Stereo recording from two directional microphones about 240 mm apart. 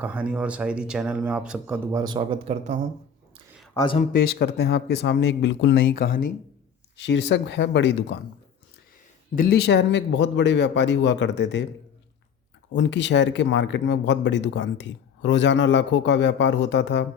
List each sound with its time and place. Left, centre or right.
0.0 s speech: centre; by 2.7 s right
3.8 s speech: centre
4.1 s speech: left
6.9 s speech: left
9.3 s speech: left
12.7 s speech: left